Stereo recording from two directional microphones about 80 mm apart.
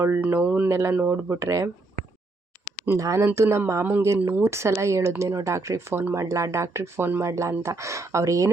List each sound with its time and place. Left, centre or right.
0.2 s speech: right
2.9 s speech: right
6.1 s speech: right